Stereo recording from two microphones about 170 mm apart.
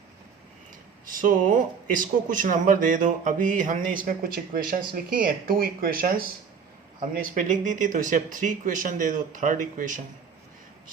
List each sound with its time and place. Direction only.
1.0 s speech: 50° right (ahead or behind)